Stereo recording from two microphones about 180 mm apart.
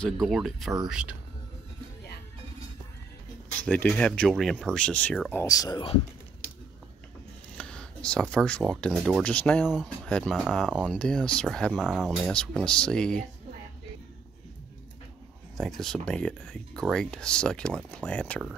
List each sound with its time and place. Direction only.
0.0 s speech: centre (ahead or behind)
3.6 s speech: 5° left (ahead or behind)
5.4 s speech: 20° left (ahead or behind)
7.5 s speech: 5° left (ahead or behind)
15.5 s speech: centre (ahead or behind)